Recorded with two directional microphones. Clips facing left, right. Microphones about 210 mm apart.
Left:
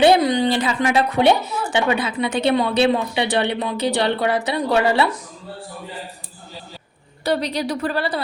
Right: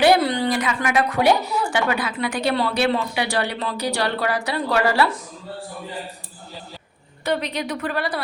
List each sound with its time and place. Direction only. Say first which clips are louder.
0.0 s speech: left 3 dB; 20° left (ahead or behind)
7.3 s a woman's voice: left 3 dB; 35° left (ahead or behind)